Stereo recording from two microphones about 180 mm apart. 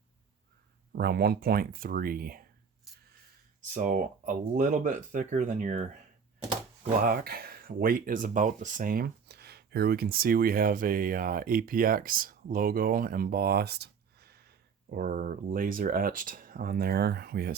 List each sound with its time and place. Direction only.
0.9 s speech: 60° right (ahead or behind)
3.8 s speech: 45° right (ahead or behind)
7.0 s speech: 55° right (ahead or behind)